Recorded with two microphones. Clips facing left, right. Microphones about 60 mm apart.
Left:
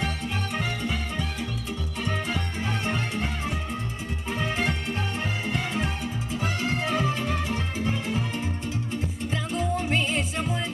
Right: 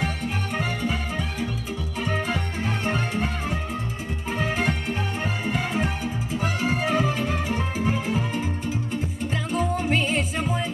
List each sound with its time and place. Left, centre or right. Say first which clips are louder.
0.6 s music: right 4 dB; centre
2.6 s music: right 3 dB; centre